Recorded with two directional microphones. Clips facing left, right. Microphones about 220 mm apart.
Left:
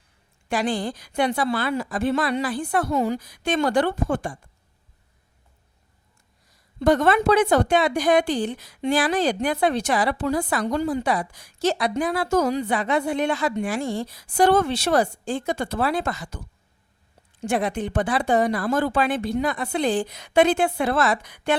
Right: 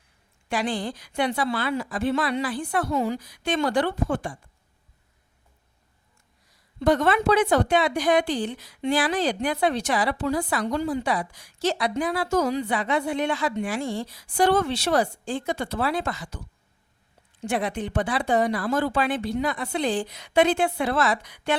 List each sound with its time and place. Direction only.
0.4 s a woman's voice: 45° left (ahead or behind)
6.7 s a woman's voice: 45° left (ahead or behind)
17.4 s a woman's voice: 45° left (ahead or behind)